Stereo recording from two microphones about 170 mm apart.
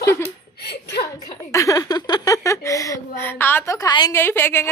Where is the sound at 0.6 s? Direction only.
75° left (ahead or behind).